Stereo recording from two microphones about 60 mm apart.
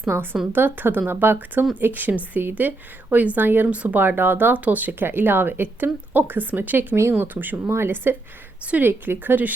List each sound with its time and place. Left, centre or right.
0.1 s a woman's voice: right
0.5 s speech: right
8.6 s a woman's voice: right